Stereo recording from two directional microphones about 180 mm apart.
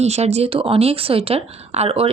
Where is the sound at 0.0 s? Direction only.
35° right (ahead or behind).